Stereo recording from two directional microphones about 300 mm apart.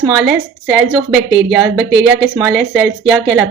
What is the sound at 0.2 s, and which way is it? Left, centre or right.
Speech, centre.